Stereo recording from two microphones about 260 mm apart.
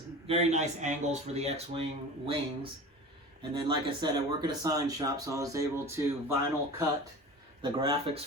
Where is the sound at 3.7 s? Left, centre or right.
Centre.